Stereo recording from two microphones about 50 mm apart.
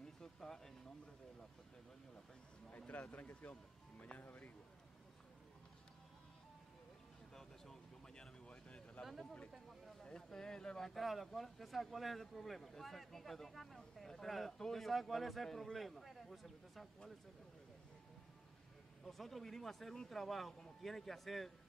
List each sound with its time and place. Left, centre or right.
0.0 s a sound: centre
2.9 s speech: left
8.5 s a sound: left
9.0 s speech: centre
10.0 s speech: centre
11.0 s speech: centre
19.0 s speech: centre